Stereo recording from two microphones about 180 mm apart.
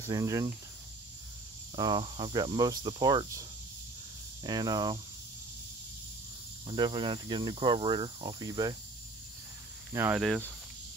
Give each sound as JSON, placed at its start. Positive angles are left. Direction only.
{"t": 0.0, "sound": "speech", "side_deg": -20}
{"t": 1.8, "sound": "cricket", "side_deg": -25}
{"t": 6.7, "sound": "cricket", "side_deg": -25}
{"t": 9.9, "sound": "speech", "side_deg": -10}